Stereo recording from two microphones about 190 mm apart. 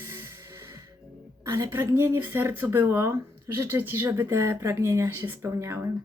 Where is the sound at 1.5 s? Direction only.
15° right (ahead or behind).